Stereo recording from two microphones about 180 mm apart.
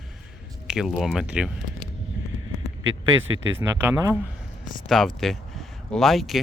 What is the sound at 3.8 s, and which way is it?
Speech, 15° right (ahead or behind).